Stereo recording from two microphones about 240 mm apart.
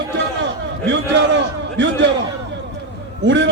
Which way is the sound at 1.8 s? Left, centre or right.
Right.